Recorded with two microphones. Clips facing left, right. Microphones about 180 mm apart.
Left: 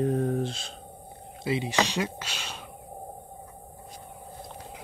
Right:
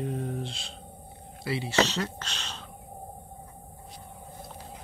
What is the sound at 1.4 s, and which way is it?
Speech, 20° left (ahead or behind).